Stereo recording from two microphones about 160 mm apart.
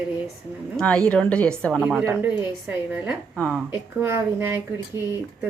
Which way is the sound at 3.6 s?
15° right (ahead or behind).